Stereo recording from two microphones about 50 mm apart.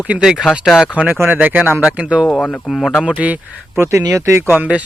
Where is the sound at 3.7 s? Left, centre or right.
Right.